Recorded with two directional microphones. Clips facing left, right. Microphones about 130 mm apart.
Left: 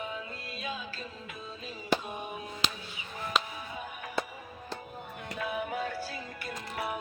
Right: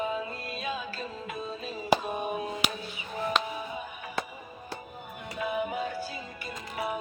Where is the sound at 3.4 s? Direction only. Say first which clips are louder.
Even; 5° left (ahead or behind).